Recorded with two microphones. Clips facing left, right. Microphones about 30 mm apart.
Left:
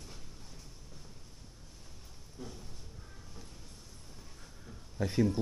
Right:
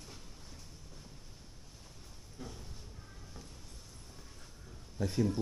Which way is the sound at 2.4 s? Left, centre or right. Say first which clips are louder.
Left 1 dB; centre.